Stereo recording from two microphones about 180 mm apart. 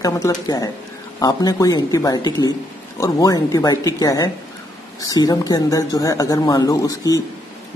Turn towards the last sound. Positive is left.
turn(degrees=20)  # may be behind; listen again after turning